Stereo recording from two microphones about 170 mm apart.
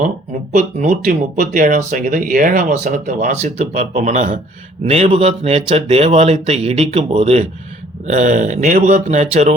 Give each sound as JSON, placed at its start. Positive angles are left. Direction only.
{"t": 0.5, "sound": "speech", "side_deg": -45}
{"t": 3.3, "sound": "speech", "side_deg": -40}